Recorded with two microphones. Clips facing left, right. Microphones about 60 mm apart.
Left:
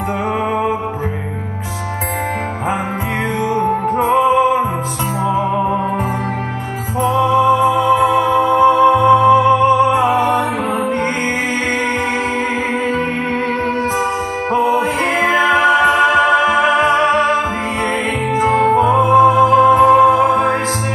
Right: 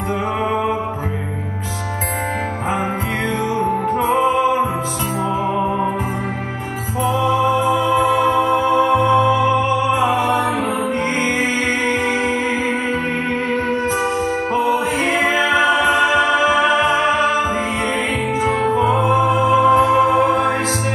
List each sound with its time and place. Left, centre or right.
4.2 s music: left
7.1 s music: left
14.5 s music: left
18.9 s music: left